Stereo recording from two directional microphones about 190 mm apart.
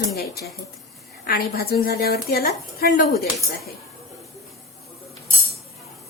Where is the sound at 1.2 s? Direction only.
55° left (ahead or behind).